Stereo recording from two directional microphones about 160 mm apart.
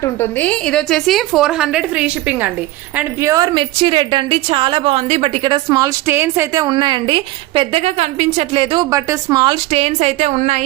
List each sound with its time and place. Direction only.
0.0 s a woman's voice: 15° left (ahead or behind); by 2.5 s 10° right (ahead or behind)
3.2 s a woman's voice: 20° right (ahead or behind)
6.1 s a woman's voice: 15° right (ahead or behind); by 10.6 s 45° right (ahead or behind)